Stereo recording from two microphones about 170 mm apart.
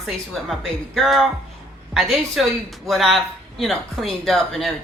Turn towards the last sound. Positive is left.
turn(degrees=0)  # may be behind; listen again after turning